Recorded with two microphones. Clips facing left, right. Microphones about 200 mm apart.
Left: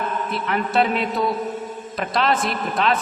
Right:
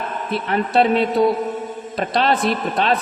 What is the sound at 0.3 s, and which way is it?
A man's voice, 30° right (ahead or behind).